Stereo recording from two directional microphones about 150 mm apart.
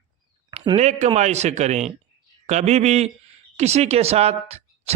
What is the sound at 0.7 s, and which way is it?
A man's voice, 50° right (ahead or behind).